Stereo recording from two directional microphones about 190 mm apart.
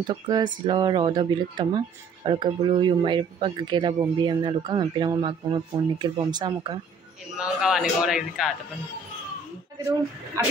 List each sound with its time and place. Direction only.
0.0 s speech: 25° right (ahead or behind)
7.3 s a man's voice: 5° right (ahead or behind)
10.4 s speech: 15° right (ahead or behind)